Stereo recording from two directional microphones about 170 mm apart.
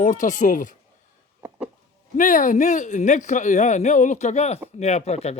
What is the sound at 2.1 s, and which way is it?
Speech, 50° left (ahead or behind).